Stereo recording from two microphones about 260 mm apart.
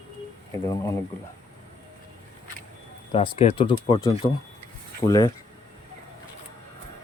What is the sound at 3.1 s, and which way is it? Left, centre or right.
Speech, left.